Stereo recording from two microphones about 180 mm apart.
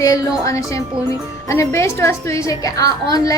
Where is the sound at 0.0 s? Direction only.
20° left (ahead or behind).